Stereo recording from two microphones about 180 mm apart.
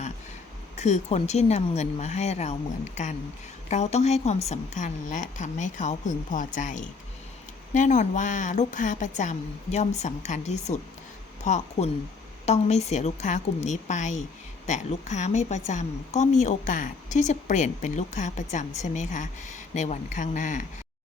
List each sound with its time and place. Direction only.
0.8 s a woman's voice: 40° left (ahead or behind)